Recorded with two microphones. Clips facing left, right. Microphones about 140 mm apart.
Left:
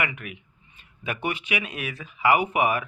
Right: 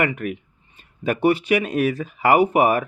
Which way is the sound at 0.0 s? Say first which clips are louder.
Right 8 dB; 45° right (ahead or behind).